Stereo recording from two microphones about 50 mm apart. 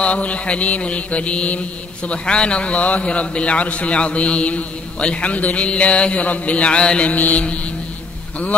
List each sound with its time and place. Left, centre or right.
0.0 s a man's voice: left